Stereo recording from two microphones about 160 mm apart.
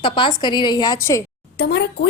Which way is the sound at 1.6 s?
90° left.